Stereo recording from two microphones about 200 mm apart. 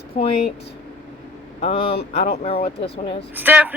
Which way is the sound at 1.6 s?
30° left (ahead or behind).